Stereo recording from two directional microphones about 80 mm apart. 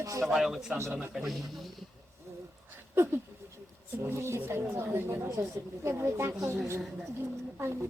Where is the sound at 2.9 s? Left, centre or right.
Right.